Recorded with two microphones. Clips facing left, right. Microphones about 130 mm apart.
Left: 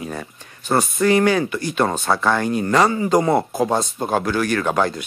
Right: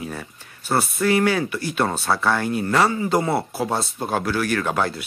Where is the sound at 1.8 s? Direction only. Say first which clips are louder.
Left 3 dB; 15° left (ahead or behind).